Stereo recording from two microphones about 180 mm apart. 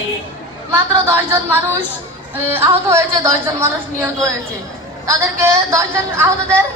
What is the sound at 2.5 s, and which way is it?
A woman's voice, 15° right (ahead or behind).